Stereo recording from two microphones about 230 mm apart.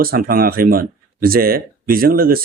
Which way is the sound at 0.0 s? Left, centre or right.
Right.